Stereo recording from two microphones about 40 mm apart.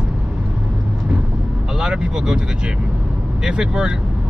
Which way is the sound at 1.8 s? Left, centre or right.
Centre.